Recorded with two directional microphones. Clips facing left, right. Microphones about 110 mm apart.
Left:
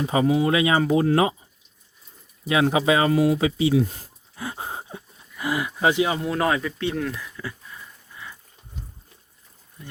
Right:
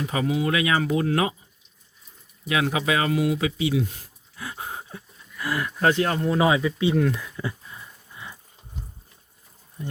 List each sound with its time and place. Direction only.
0.0 s speech: 25° left (ahead or behind)
2.5 s speech: 25° left (ahead or behind); by 6.3 s 5° left (ahead or behind)
6.3 s speech: 5° right (ahead or behind)
7.2 s a sound: 20° right (ahead or behind)